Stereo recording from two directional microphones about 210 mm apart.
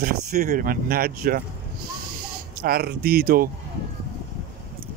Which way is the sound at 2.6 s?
45° right (ahead or behind).